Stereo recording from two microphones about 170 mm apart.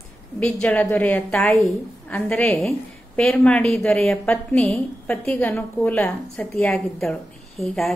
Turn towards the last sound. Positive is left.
turn(degrees=0)  # may be behind; listen again after turning